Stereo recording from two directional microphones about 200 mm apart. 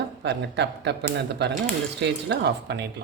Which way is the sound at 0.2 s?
60° right (ahead or behind).